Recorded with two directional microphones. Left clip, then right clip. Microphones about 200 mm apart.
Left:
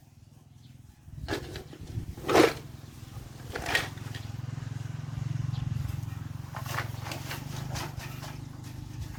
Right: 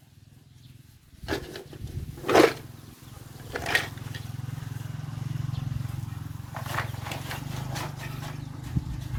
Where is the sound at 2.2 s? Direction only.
15° right (ahead or behind).